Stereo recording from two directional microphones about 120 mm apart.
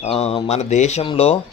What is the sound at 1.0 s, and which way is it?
Speech, 55° left (ahead or behind).